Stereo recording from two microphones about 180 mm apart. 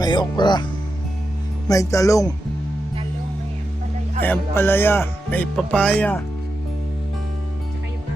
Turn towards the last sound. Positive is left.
turn(degrees=10)  # may be behind; listen again after turning